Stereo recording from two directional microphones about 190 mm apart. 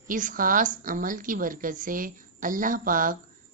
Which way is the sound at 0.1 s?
45° right (ahead or behind).